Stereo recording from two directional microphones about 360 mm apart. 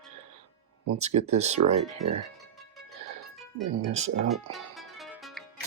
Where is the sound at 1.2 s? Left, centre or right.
Centre.